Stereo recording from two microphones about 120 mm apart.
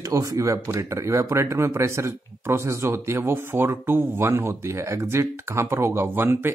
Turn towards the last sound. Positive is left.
turn(degrees=-20)  # may be behind; listen again after turning